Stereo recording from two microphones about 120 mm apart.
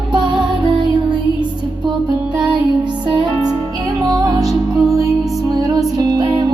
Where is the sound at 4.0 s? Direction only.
30° right (ahead or behind).